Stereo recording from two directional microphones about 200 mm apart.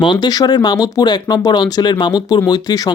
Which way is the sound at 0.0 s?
20° left (ahead or behind).